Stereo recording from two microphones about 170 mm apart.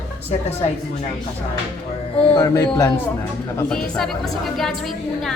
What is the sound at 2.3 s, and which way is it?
Speech, 20° left (ahead or behind).